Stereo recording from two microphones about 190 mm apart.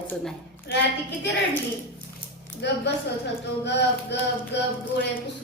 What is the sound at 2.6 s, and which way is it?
Speech, 65° left (ahead or behind).